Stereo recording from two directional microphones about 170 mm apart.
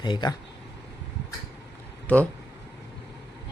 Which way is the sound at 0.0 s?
25° left (ahead or behind).